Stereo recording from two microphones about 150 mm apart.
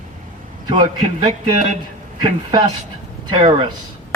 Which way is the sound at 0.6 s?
30° right (ahead or behind).